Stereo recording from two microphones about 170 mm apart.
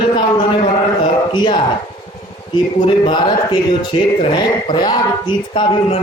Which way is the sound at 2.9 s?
30° left (ahead or behind).